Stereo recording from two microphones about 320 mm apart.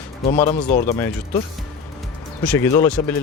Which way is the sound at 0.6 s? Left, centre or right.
Left.